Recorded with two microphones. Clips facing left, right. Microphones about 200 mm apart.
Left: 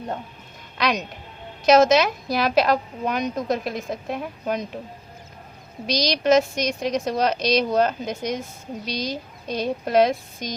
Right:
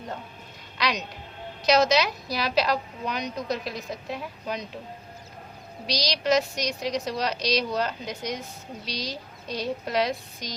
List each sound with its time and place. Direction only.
0.8 s a woman's voice: 50° left (ahead or behind)
5.8 s a woman's voice: 50° left (ahead or behind)